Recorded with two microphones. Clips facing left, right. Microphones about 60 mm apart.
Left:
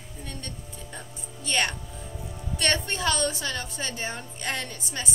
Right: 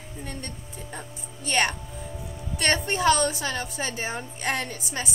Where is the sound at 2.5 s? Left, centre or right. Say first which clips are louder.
Right 2 dB; right.